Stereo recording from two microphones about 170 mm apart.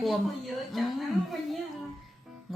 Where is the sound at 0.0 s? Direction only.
Centre (ahead or behind).